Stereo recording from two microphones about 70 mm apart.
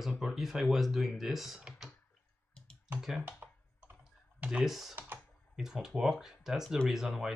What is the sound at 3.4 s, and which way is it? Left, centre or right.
Computer keyboard, right.